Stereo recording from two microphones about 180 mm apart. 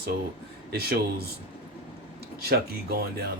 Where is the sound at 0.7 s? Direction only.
60° right (ahead or behind).